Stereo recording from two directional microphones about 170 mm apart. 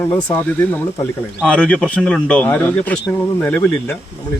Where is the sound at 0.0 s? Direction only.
10° left (ahead or behind).